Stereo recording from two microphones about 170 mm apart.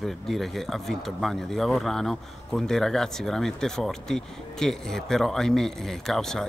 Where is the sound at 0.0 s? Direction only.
Centre (ahead or behind).